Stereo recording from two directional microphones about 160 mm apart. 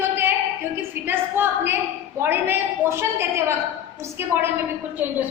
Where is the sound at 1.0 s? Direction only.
15° right (ahead or behind).